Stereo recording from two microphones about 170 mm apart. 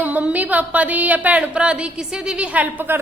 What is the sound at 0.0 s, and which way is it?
A woman's voice, 10° right (ahead or behind).